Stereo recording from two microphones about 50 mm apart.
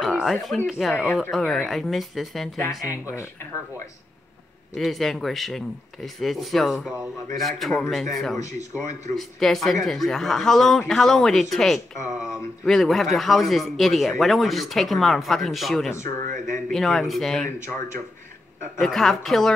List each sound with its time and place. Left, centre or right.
0.0 s speech: centre
2.9 s speech: left
4.7 s speech: centre
15.9 s speech: left
16.7 s speech: centre
18.8 s speech: centre